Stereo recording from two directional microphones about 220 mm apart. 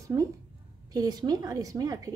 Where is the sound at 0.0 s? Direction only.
15° right (ahead or behind).